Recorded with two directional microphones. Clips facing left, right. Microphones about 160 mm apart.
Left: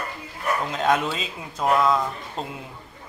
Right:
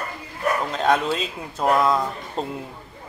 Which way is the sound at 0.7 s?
Centre (ahead or behind).